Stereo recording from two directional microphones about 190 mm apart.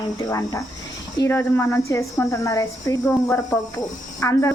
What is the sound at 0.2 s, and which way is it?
Speech, 15° left (ahead or behind).